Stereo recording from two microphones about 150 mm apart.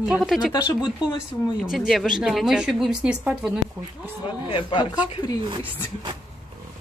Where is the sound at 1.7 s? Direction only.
Centre (ahead or behind).